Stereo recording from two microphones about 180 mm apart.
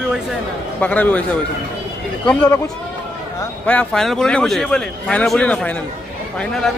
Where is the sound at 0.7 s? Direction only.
10° left (ahead or behind).